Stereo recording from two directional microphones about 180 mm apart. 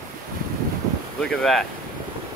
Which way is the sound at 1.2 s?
5° left (ahead or behind).